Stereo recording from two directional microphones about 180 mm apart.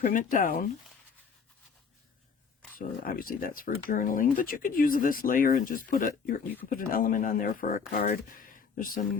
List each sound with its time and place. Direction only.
0.0 s speech: 50° left (ahead or behind)
2.7 s speech: 50° left (ahead or behind)